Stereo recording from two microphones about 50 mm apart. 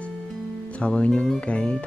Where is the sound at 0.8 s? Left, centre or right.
Left.